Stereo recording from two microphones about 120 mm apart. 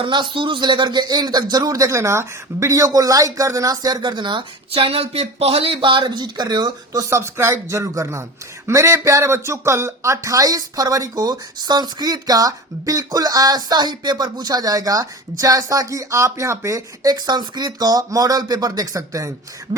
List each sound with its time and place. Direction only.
0.0 s speech: 45° right (ahead or behind)
7.1 s speech: 20° right (ahead or behind)